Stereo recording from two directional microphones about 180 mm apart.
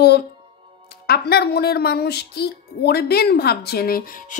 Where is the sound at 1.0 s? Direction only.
60° left (ahead or behind).